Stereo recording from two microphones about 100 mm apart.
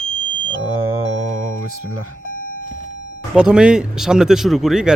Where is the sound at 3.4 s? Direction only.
10° right (ahead or behind).